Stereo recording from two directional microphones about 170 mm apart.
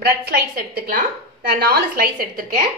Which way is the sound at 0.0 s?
70° right (ahead or behind).